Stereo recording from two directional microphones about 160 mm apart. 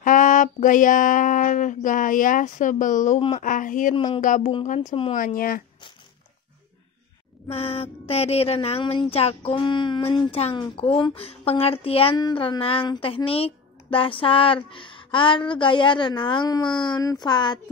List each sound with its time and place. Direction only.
0.0 s a sound: 55° left (ahead or behind)
3.2 s speech: 50° left (ahead or behind)
3.9 s speech: 35° left (ahead or behind)
4.2 s a sound: 55° left (ahead or behind)
4.7 s speech: 35° left (ahead or behind)
5.1 s speech: 60° left (ahead or behind)
7.4 s speech: 40° left (ahead or behind)